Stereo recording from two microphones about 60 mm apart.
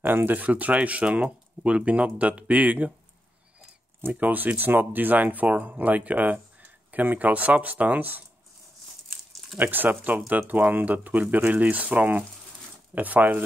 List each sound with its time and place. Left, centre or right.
0.0 s speech: right
4.1 s speech: right
9.6 s speech: right